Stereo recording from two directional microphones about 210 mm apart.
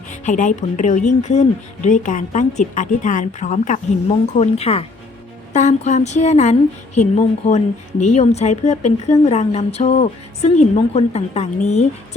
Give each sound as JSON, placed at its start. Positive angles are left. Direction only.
{"t": 0.1, "sound": "speech", "side_deg": 35}